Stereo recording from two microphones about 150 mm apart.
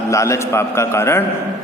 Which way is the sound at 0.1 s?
20° left (ahead or behind).